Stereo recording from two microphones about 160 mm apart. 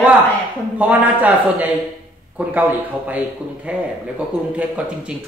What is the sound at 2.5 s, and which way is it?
Speech, 10° right (ahead or behind).